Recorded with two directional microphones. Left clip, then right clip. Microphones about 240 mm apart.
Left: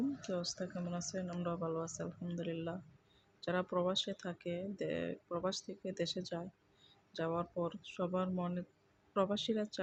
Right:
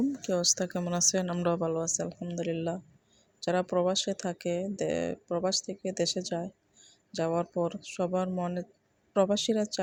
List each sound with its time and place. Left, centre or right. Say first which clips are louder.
0.3 s a woman's voice: right 12 dB; right